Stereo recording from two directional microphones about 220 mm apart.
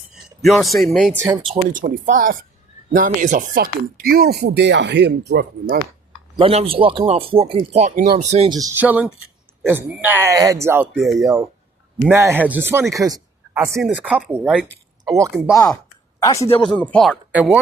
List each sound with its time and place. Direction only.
0.4 s speech: centre (ahead or behind)
1.1 s speech: 15° right (ahead or behind)
1.7 s speech: 40° right (ahead or behind)
6.4 s speech: 25° right (ahead or behind)
8.4 s speech: 15° right (ahead or behind)
15.0 s speech: 15° right (ahead or behind)
16.2 s speech: 15° left (ahead or behind); by 17.6 s 5° right (ahead or behind)